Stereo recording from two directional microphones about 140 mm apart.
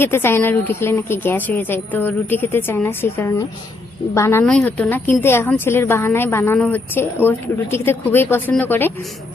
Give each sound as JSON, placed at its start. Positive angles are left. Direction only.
{"t": 0.0, "sound": "a woman's voice", "side_deg": 15}